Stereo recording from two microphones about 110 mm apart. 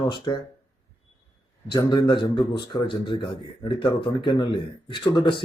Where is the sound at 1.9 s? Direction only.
45° left (ahead or behind).